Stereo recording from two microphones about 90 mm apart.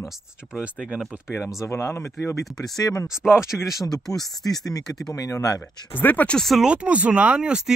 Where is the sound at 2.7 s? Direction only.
40° left (ahead or behind).